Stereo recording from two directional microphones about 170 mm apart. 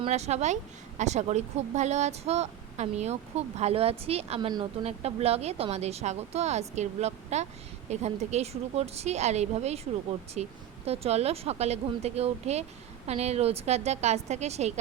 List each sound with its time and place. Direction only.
0.0 s speech: 40° right (ahead or behind)